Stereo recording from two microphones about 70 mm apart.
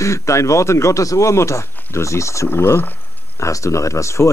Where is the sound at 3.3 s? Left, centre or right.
Left.